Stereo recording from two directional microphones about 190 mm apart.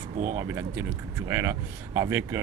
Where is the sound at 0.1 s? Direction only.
45° right (ahead or behind).